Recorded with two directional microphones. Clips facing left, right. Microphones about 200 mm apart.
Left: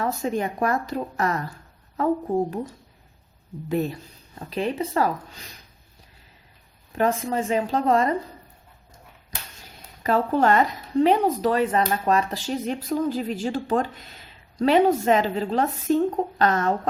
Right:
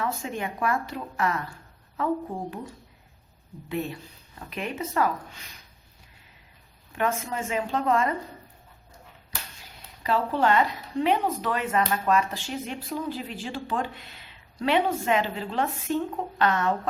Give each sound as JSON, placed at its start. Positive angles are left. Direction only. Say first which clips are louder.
{"t": 0.0, "sound": "speech", "louder": "left 5 dB", "side_deg": 40}
{"t": 3.7, "sound": "speech", "louder": "left 6 dB", "side_deg": 40}
{"t": 6.9, "sound": "speech", "louder": "left 5 dB", "side_deg": 35}
{"t": 10.0, "sound": "speech", "louder": "left 4 dB", "side_deg": 45}